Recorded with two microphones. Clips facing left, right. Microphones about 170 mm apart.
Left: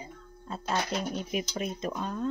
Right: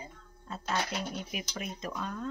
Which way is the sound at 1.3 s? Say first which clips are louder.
Left 7 dB; 25° left (ahead or behind).